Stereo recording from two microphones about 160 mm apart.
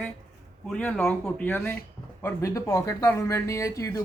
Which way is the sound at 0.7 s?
5° left (ahead or behind).